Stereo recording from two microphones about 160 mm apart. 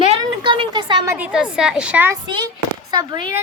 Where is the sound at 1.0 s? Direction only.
10° right (ahead or behind).